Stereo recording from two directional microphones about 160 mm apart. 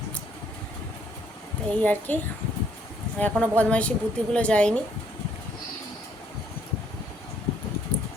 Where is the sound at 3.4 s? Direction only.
10° left (ahead or behind).